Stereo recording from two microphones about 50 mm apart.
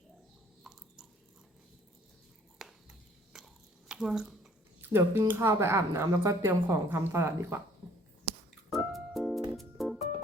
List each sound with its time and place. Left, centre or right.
2.6 s a sound: centre
4.9 s speech: right
6.7 s speech: right
8.7 s music: centre